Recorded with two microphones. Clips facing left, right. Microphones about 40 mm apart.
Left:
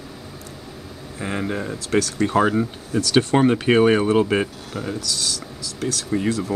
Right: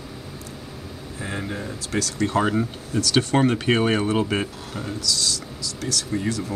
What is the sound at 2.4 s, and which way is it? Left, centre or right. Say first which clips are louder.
Speech: left 3 dB; centre.